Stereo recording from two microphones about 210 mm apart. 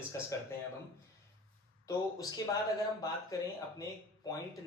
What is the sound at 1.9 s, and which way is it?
Speech, 15° left (ahead or behind).